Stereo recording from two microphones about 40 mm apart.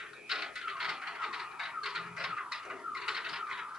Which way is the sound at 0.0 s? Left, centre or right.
Centre.